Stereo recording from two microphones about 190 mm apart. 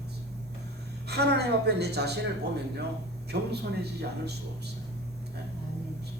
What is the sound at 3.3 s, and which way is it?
Speech, 60° right (ahead or behind).